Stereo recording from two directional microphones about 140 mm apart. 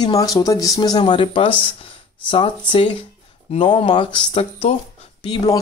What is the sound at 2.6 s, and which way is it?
Speech, 35° left (ahead or behind).